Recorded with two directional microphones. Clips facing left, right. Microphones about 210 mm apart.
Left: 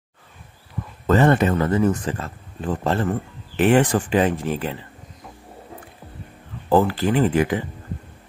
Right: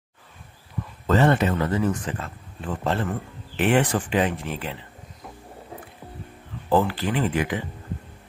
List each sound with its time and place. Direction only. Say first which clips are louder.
1.0 s speech: left 3 dB; 50° left (ahead or behind)
6.7 s speech: left 4 dB; 40° left (ahead or behind)